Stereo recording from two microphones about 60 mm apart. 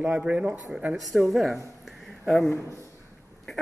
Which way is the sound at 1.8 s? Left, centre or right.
Centre.